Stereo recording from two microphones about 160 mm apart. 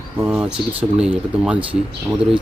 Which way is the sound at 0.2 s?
10° right (ahead or behind).